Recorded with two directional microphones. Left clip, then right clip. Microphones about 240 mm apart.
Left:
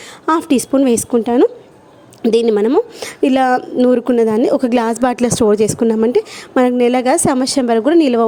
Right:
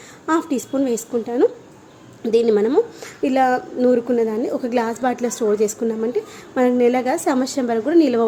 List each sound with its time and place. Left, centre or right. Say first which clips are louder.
0.3 s a woman's voice: left 6 dB; left